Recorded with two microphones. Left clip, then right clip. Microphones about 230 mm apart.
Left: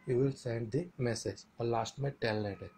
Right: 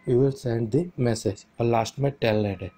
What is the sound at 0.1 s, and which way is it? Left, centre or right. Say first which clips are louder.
Speech: right 10 dB; right.